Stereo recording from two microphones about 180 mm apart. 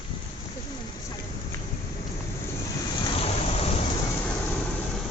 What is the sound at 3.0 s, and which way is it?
Rain, 30° left (ahead or behind).